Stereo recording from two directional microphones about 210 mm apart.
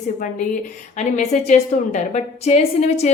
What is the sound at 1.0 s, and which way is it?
A woman's voice, 35° left (ahead or behind).